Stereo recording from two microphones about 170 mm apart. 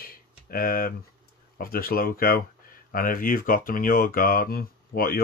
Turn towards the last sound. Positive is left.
turn(degrees=60)  # may be behind; listen again after turning